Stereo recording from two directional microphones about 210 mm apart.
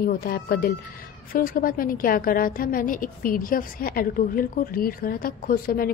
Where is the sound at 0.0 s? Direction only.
45° left (ahead or behind).